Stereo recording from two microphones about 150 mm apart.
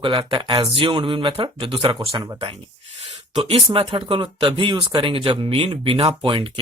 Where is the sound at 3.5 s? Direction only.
40° right (ahead or behind).